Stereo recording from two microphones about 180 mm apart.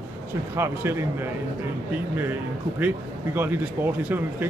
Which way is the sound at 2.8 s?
10° right (ahead or behind).